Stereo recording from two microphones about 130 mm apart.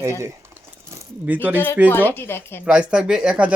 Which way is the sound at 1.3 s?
15° right (ahead or behind).